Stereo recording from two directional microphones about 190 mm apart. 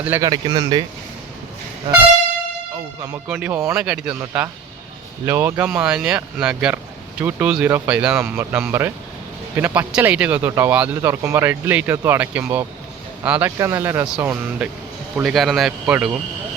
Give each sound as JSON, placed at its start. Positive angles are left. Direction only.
{"t": 0.0, "sound": "speech", "side_deg": -10}
{"t": 0.3, "sound": "speech", "side_deg": -20}
{"t": 3.2, "sound": "speech", "side_deg": -10}
{"t": 5.2, "sound": "speech", "side_deg": -15}